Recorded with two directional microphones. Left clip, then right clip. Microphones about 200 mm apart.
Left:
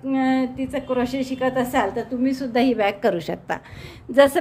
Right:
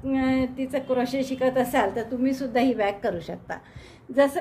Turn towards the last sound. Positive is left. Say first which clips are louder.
# left 6 dB
turn(degrees=30)  # may be behind; listen again after turning